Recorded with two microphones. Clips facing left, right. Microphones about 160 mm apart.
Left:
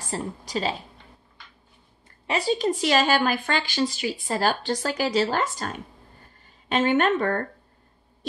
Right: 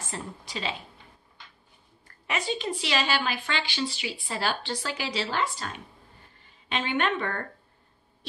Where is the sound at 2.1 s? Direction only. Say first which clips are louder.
Left 6 dB; 30° left (ahead or behind).